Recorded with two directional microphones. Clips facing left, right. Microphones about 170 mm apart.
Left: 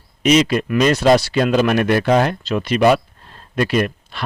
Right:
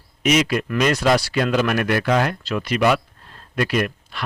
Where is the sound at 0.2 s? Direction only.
25° left (ahead or behind).